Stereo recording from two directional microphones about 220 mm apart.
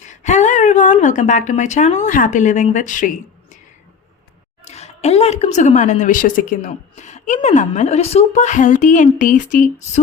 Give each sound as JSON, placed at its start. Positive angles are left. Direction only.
{"t": 0.0, "sound": "a woman's voice", "side_deg": 35}
{"t": 4.6, "sound": "a woman's voice", "side_deg": 30}